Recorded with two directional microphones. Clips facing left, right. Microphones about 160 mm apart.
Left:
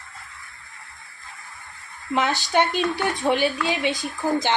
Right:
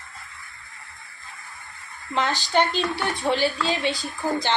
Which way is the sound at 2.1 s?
15° left (ahead or behind).